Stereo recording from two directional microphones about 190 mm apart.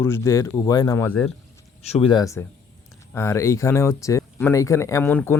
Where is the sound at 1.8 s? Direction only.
30° left (ahead or behind); by 5.3 s 10° left (ahead or behind).